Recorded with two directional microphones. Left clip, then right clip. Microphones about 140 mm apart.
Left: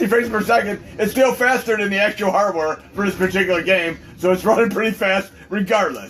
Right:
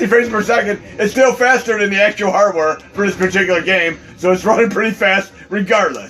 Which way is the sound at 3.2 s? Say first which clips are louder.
Right 3 dB; 30° right (ahead or behind).